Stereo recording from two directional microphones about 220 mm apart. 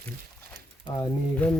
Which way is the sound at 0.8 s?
15° left (ahead or behind).